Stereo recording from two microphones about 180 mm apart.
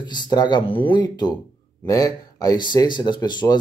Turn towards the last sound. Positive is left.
turn(degrees=25)  # may be behind; listen again after turning